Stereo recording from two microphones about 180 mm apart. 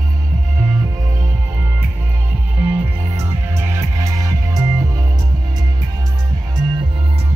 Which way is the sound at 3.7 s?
15° right (ahead or behind).